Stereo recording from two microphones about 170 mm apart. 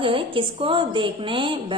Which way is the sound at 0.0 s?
30° right (ahead or behind).